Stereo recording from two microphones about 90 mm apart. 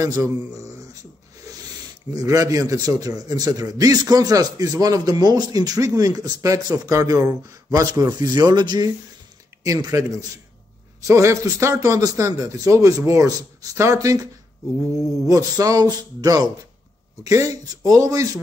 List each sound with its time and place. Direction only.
0.0 s a man's voice: 35° right (ahead or behind)
2.1 s a man's voice: 35° right (ahead or behind)
9.6 s a man's voice: 35° right (ahead or behind)
17.2 s a man's voice: 35° right (ahead or behind)